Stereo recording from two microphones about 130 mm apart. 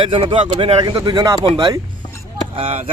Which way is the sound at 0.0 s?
40° right (ahead or behind).